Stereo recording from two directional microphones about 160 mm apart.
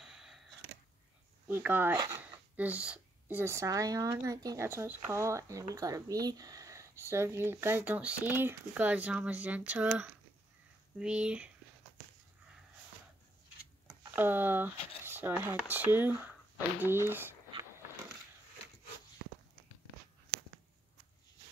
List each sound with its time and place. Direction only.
0.0 s a sound: 5° right (ahead or behind)
1.5 s a woman's voice: 15° right (ahead or behind)
2.5 s a woman's voice: 10° right (ahead or behind)
13.8 s a woman's voice: 10° right (ahead or behind)